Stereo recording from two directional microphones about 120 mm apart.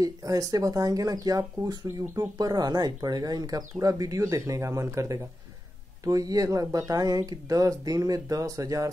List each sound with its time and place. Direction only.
0.0 s speech: 30° right (ahead or behind)